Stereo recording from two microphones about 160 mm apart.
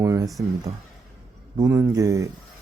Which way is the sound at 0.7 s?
45° right (ahead or behind).